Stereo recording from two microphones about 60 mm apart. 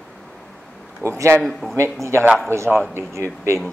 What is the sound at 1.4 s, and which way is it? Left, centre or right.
Speech, centre.